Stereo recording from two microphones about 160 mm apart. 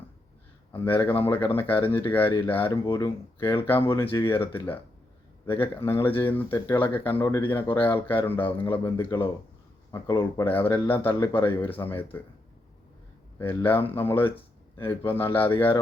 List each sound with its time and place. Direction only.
0.7 s speech: 10° left (ahead or behind)
2.6 s speech: 25° left (ahead or behind)
3.9 s speech: 15° left (ahead or behind)
10.4 s speech: 15° left (ahead or behind)
13.4 s speech: 15° left (ahead or behind)